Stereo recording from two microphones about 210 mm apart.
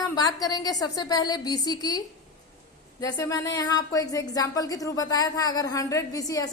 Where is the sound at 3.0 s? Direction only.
15° left (ahead or behind).